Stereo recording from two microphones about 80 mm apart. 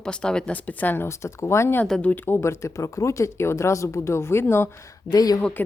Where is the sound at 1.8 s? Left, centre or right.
Centre.